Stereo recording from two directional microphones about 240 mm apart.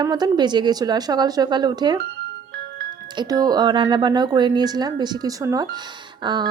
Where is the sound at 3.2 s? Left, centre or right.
Centre.